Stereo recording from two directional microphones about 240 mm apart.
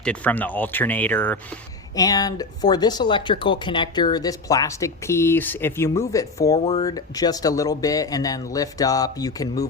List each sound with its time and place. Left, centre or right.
0.0 s speech: centre